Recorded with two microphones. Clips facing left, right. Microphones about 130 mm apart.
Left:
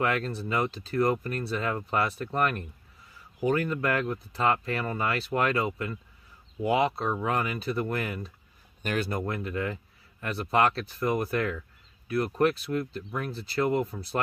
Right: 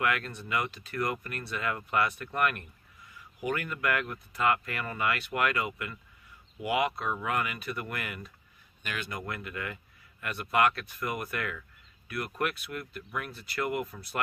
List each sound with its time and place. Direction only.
0.0 s speech: 30° left (ahead or behind)